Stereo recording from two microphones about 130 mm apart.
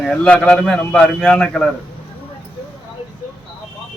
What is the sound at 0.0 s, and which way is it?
A man's voice, 5° left (ahead or behind).